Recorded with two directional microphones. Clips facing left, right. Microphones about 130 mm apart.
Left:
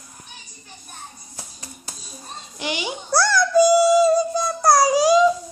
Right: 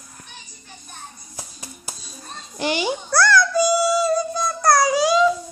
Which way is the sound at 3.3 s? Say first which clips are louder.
Left 5 dB; 50° left (ahead or behind).